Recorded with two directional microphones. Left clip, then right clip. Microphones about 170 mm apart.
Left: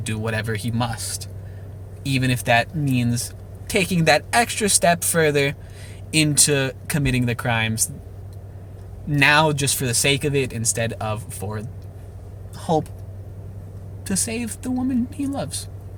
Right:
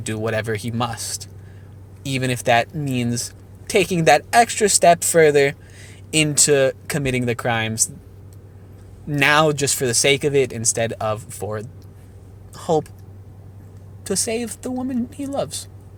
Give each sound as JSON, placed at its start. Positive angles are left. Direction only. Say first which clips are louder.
{"t": 0.0, "sound": "speech", "louder": "right 3 dB", "side_deg": -40}
{"t": 2.0, "sound": "speech", "louder": "right 1 dB", "side_deg": -40}
{"t": 9.1, "sound": "speech", "louder": "right 1 dB", "side_deg": -45}
{"t": 12.5, "sound": "a sound", "louder": "right 2 dB", "side_deg": -50}
{"t": 14.0, "sound": "speech", "louder": "right 4 dB", "side_deg": -50}